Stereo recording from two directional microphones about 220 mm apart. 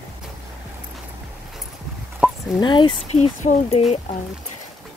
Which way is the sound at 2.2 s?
5° right (ahead or behind).